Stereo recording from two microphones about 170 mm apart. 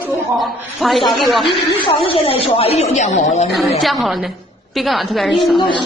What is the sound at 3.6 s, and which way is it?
A woman's voice, centre (ahead or behind).